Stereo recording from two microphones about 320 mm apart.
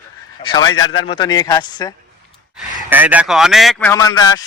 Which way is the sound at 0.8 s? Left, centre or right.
Left.